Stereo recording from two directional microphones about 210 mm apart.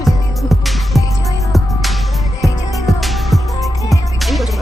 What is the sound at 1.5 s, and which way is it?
Music, centre (ahead or behind).